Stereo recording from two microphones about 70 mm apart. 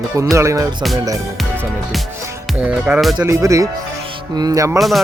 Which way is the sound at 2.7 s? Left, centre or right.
Centre.